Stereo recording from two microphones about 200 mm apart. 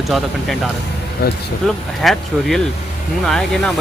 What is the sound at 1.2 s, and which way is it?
Speech, 50° left (ahead or behind).